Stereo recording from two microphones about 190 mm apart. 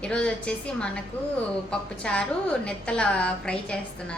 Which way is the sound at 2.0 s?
5° left (ahead or behind).